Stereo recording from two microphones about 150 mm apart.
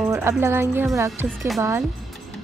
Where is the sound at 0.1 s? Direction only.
15° right (ahead or behind).